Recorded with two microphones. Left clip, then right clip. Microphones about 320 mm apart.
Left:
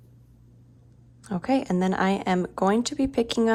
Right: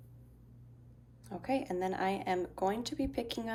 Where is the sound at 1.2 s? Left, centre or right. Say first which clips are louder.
Left 10 dB; left.